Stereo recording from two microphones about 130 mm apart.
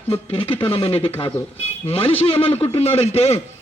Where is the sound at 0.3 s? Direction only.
45° left (ahead or behind).